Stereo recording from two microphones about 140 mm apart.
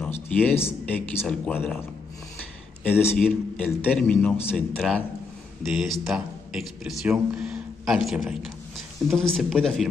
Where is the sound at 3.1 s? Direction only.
Centre (ahead or behind).